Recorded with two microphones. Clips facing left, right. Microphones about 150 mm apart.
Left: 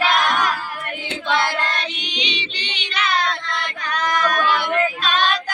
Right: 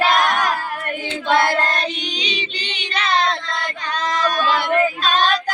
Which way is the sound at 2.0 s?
45° right (ahead or behind).